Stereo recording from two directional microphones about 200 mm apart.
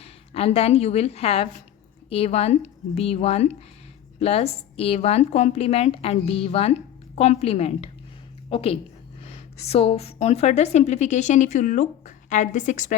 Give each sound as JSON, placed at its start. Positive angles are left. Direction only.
{"t": 0.0, "sound": "a woman's voice", "side_deg": 30}